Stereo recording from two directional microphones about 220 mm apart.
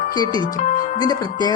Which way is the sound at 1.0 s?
20° left (ahead or behind).